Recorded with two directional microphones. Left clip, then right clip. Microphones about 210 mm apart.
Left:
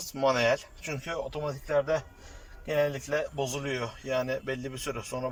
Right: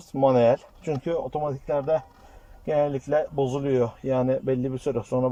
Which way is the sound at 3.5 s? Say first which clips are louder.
Right 9 dB; 35° right (ahead or behind).